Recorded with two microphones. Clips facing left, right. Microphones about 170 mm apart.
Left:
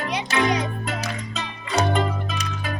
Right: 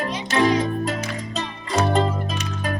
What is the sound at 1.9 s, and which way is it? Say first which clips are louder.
Music: right 3 dB; 35° right (ahead or behind).